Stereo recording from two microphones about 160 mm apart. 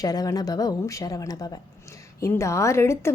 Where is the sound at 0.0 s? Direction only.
25° left (ahead or behind).